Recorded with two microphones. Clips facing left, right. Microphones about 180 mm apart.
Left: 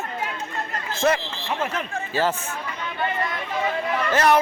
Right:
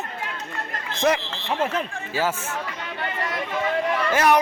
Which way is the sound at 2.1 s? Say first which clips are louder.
Left 2 dB; 10° right (ahead or behind).